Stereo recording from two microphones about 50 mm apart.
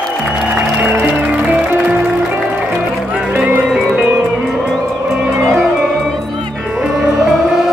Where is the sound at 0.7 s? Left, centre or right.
Right.